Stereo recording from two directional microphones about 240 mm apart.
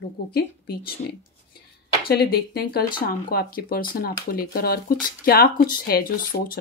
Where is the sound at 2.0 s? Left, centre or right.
Left.